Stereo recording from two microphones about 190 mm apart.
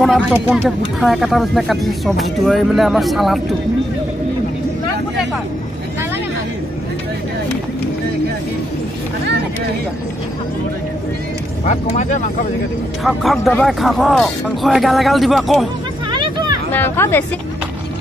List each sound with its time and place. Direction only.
0.0 s speech: 5° right (ahead or behind)
11.6 s speech: 40° left (ahead or behind)
13.0 s speech: centre (ahead or behind)
16.1 s vehicle: 25° right (ahead or behind)
16.7 s speech: 10° left (ahead or behind)